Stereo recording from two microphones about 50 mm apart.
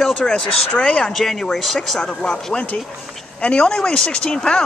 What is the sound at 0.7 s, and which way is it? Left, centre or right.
Speech, left.